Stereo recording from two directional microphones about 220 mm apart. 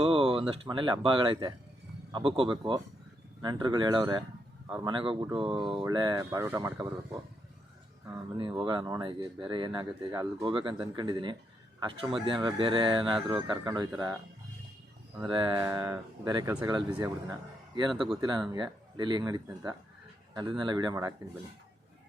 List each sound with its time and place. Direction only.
0.0 s speech: 25° right (ahead or behind)
8.4 s speech: 20° right (ahead or behind)
15.2 s speech: 20° right (ahead or behind)